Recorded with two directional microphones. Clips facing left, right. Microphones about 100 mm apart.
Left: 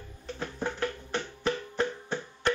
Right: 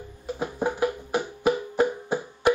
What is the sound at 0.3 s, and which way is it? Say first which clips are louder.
Music: right 7 dB; 15° right (ahead or behind).